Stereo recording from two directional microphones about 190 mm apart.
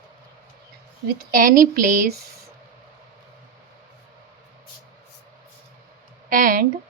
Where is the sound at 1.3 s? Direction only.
45° right (ahead or behind).